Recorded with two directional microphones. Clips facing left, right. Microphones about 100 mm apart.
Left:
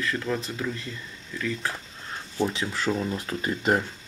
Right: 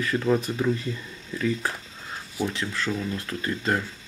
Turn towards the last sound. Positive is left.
turn(degrees=15)  # may be behind; listen again after turning